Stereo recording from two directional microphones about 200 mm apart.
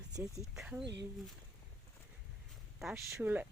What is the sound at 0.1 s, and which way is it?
Speech, 15° right (ahead or behind).